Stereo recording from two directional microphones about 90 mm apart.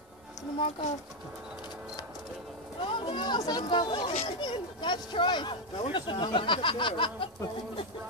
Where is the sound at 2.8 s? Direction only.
70° left (ahead or behind).